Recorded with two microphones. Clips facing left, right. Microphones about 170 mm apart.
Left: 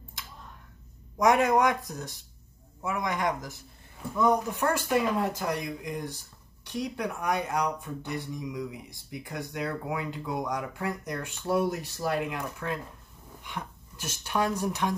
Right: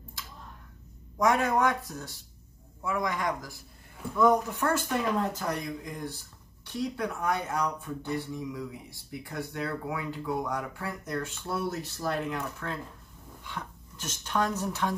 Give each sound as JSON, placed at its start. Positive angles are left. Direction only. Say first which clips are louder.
{"t": 1.1, "sound": "speech", "louder": "left 3 dB", "side_deg": 20}